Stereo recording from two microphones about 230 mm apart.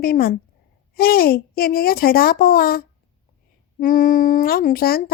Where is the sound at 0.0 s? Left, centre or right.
Left.